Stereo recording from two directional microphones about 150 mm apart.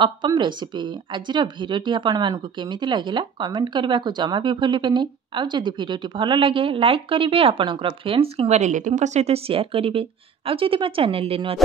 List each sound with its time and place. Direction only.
0.0 s speech: 30° right (ahead or behind)